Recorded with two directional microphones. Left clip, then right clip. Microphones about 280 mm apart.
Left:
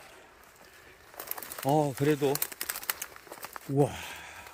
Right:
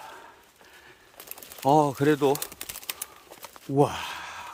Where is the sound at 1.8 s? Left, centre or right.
Centre.